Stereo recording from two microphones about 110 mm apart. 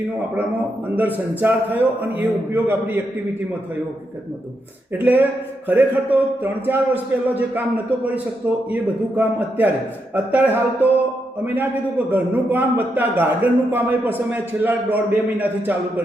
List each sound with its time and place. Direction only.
0.9 s a man's voice: 15° right (ahead or behind)
4.9 s a man's voice: 15° right (ahead or behind)
8.7 s a man's voice: 15° right (ahead or behind)